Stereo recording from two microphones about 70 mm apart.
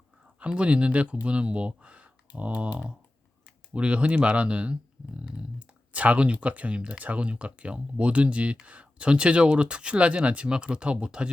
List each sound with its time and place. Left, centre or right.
0.3 s speech: centre